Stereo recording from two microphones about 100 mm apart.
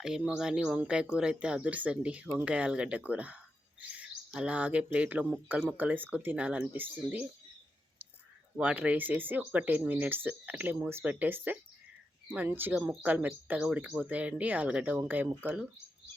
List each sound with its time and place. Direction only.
0.0 s speech: 5° right (ahead or behind)
8.5 s speech: 15° right (ahead or behind)